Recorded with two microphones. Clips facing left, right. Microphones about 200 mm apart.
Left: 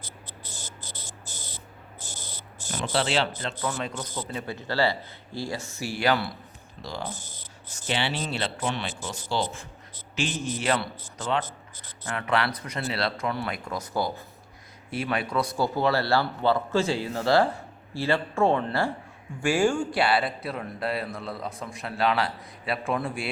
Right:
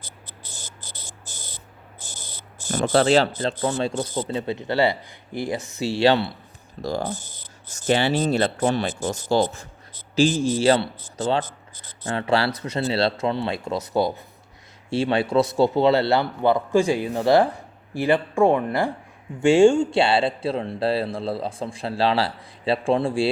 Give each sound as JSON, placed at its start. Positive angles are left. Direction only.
{"t": 2.6, "sound": "speech", "side_deg": -45}
{"t": 6.8, "sound": "a man's voice", "side_deg": -45}